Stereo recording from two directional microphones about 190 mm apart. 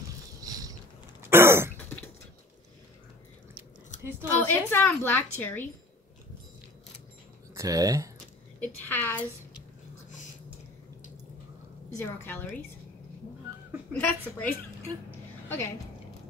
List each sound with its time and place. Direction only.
0.4 s mechanisms: 20° right (ahead or behind)
1.3 s throat clearing: 15° right (ahead or behind)
4.4 s a woman's voice: 10° left (ahead or behind)
7.5 s speech: 20° right (ahead or behind)
8.5 s a woman's voice: 10° left (ahead or behind)
12.0 s a woman's voice: 10° left (ahead or behind)
13.9 s a woman's voice: 10° left (ahead or behind)
15.4 s a sound: 15° left (ahead or behind)